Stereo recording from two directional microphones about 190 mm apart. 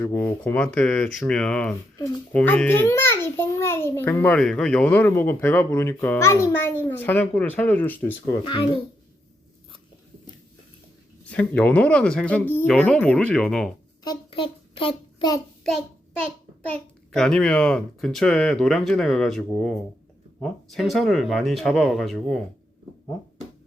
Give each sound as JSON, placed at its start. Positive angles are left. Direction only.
{"t": 0.0, "sound": "a child's voice", "side_deg": 10}
{"t": 11.3, "sound": "a child's voice", "side_deg": 5}
{"t": 14.0, "sound": "a child's voice", "side_deg": 25}
{"t": 17.1, "sound": "speech", "side_deg": 5}